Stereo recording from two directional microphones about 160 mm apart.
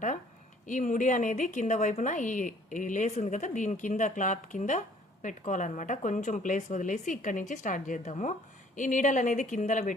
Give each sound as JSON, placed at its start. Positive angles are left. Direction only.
{"t": 0.7, "sound": "a woman's voice", "side_deg": 50}